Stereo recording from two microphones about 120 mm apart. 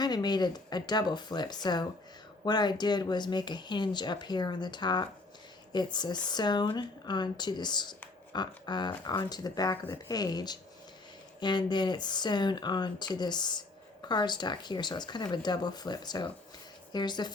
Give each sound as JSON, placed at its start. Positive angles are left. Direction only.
{"t": 0.0, "sound": "speech", "side_deg": 35}